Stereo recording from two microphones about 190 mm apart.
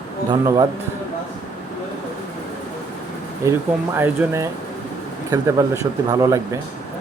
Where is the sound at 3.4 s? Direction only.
15° right (ahead or behind).